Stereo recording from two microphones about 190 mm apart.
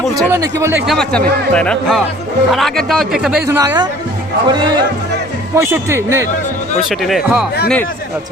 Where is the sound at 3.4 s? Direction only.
15° right (ahead or behind).